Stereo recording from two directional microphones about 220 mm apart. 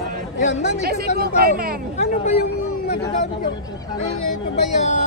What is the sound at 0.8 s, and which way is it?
Speech, 45° right (ahead or behind).